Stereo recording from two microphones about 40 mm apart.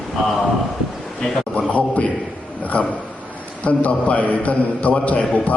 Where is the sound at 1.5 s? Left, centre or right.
Left.